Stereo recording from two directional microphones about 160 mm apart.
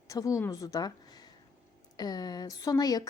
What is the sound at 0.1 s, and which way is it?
A woman's voice, 20° left (ahead or behind).